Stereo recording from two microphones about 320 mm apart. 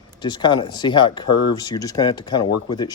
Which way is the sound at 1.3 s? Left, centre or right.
Left.